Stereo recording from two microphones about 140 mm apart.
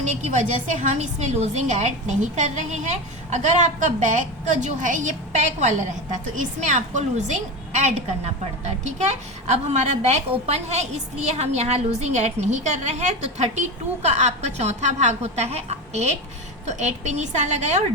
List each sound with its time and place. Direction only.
0.0 s a woman's voice: 55° right (ahead or behind)